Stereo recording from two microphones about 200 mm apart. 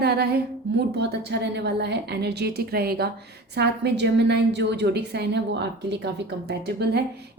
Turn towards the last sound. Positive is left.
turn(degrees=-55)  # may be behind; listen again after turning